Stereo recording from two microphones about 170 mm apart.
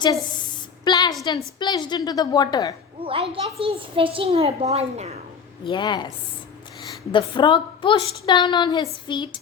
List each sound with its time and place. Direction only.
0.9 s a woman's voice: 25° left (ahead or behind)
3.0 s a child's voice: 35° right (ahead or behind)
5.6 s a woman's voice: 25° left (ahead or behind)
7.1 s a woman's voice: 30° left (ahead or behind)